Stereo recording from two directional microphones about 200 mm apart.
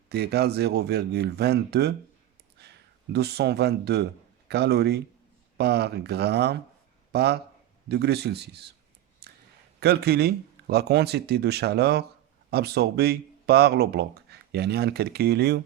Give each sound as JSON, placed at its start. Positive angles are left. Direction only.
{"t": 0.1, "sound": "speech", "side_deg": -55}
{"t": 9.2, "sound": "a sound", "side_deg": -55}
{"t": 9.8, "sound": "speech", "side_deg": -50}